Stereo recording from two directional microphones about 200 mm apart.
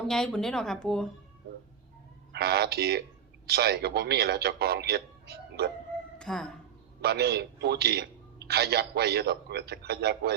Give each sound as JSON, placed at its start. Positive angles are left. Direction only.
{"t": 0.1, "sound": "speech", "side_deg": 5}
{"t": 2.3, "sound": "a man's voice", "side_deg": -55}
{"t": 6.1, "sound": "a woman's voice", "side_deg": 5}
{"t": 7.0, "sound": "a man's voice", "side_deg": -55}